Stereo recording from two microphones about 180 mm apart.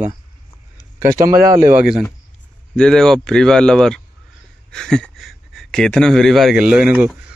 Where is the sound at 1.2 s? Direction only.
50° right (ahead or behind).